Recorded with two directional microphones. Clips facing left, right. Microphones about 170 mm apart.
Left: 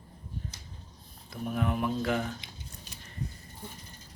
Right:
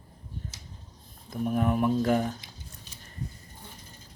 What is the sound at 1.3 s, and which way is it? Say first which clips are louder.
Speech: right 5 dB; 45° right (ahead or behind).